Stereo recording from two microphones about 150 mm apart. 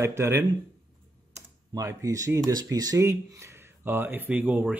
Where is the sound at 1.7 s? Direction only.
20° right (ahead or behind).